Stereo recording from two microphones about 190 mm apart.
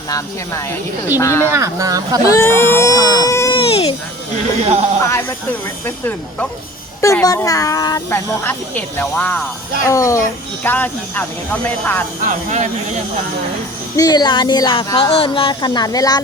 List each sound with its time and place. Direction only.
1.2 s speech: 15° left (ahead or behind)
1.5 s speech: 15° right (ahead or behind)
2.3 s speech: 10° left (ahead or behind)
3.5 s baby cry: 30° left (ahead or behind)
4.6 s speech: 35° right (ahead or behind)
5.8 s speech: 10° left (ahead or behind)
12.2 s speech: 40° right (ahead or behind)
13.9 s speech: 20° left (ahead or behind)